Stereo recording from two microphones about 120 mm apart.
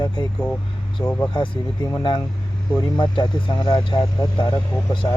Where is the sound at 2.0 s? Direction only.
40° left (ahead or behind).